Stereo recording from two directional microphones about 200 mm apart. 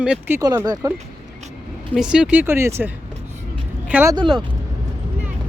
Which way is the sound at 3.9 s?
10° right (ahead or behind).